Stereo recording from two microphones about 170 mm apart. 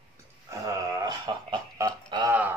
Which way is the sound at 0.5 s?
20° right (ahead or behind).